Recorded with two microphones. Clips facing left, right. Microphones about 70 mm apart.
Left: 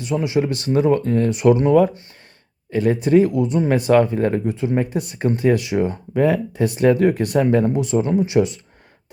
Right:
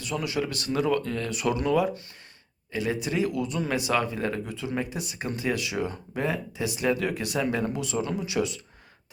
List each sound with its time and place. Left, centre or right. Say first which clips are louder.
0.1 s speech: left 9 dB; left
3.3 s speech: left 10 dB; left
6.2 s speech: left 10 dB; left